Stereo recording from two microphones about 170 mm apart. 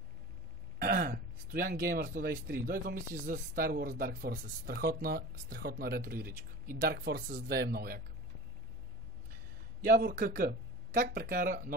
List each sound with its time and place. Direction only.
0.7 s speech: 55° right (ahead or behind)
6.8 s speech: 70° right (ahead or behind)
9.8 s speech: 55° right (ahead or behind)